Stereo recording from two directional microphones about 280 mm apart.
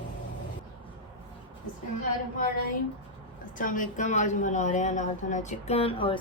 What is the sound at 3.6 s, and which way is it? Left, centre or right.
A woman's voice, left.